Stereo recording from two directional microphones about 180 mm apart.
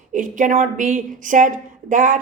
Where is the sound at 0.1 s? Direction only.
45° right (ahead or behind).